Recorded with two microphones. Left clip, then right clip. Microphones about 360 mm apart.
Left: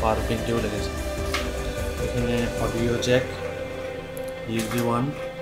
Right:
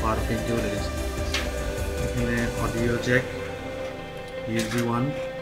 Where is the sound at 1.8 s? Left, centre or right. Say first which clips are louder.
Left 4 dB; centre.